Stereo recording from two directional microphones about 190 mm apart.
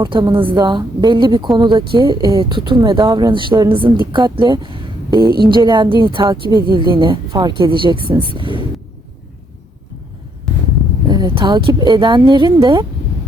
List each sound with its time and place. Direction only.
0.0 s speech: 25° right (ahead or behind)
11.1 s speech: 20° right (ahead or behind)